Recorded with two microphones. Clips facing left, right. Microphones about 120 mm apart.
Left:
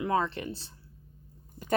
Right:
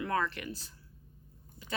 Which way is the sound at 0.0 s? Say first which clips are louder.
Left 4 dB; 25° left (ahead or behind).